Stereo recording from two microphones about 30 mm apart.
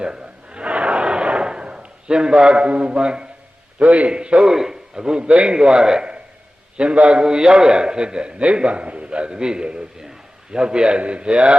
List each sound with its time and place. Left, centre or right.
0.0 s a sound: right
3.8 s a man's voice: right
4.1 s a man's voice: right
4.5 s a man's voice: centre
6.7 s a man's voice: right
7.2 s a man's voice: right
9.0 s a man's voice: right
10.0 s a sound: centre
10.6 s a man's voice: right